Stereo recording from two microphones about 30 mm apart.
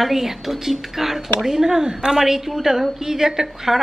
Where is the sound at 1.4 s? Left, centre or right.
Centre.